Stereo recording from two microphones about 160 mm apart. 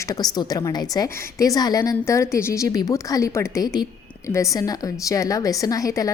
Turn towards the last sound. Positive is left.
turn(degrees=20)  # may be behind; listen again after turning